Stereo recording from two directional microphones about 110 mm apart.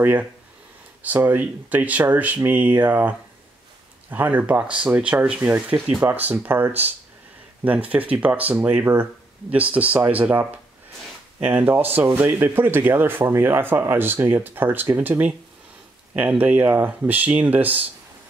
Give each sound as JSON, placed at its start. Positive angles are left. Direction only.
{"t": 0.0, "sound": "speech", "side_deg": -15}